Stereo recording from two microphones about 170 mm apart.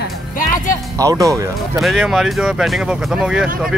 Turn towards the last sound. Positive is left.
turn(degrees=-5)  # may be behind; listen again after turning